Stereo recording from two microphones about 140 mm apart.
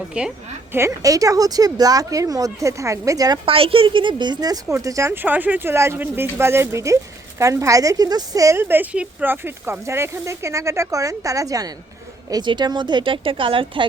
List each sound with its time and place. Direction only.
0.1 s a woman's voice: 5° right (ahead or behind)
0.8 s a woman's voice: 20° right (ahead or behind)
3.4 s a woman's voice: 40° right (ahead or behind)